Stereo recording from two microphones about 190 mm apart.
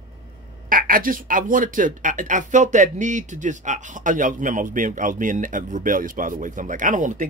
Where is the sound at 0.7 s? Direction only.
50° right (ahead or behind).